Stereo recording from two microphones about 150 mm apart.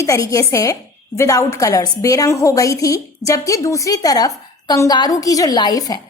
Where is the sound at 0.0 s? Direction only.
20° left (ahead or behind).